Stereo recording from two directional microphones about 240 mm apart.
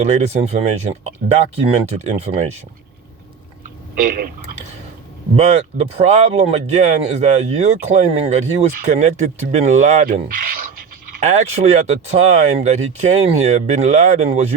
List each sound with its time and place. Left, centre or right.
0.0 s speech: right
5.4 s speech: right